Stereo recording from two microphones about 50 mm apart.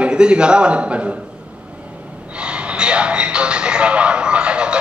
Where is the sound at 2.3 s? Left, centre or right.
Right.